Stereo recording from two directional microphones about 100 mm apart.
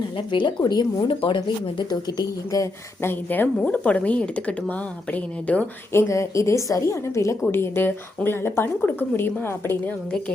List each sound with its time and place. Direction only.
0.3 s a woman's voice: 55° left (ahead or behind)
0.6 s a woman's voice: 45° left (ahead or behind)
1.0 s speech: 60° left (ahead or behind)
1.9 s a woman's voice: 40° left (ahead or behind)
3.1 s a woman's voice: 20° left (ahead or behind)
5.9 s speech: 30° left (ahead or behind)